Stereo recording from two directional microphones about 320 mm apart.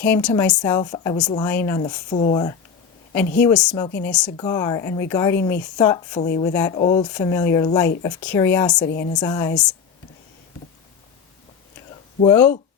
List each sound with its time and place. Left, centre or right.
0.0 s speech: centre
1.8 s speech: centre
3.4 s speech: centre
8.9 s a woman's voice: left
9.1 s speech: centre
12.2 s speech: centre